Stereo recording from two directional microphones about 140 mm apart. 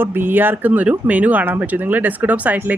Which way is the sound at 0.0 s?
15° right (ahead or behind).